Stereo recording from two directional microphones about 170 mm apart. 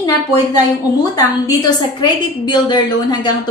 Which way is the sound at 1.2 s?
25° left (ahead or behind).